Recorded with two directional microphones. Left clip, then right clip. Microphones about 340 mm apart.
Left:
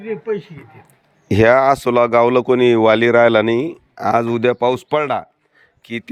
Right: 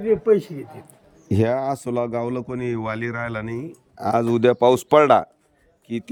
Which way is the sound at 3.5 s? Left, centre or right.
Centre.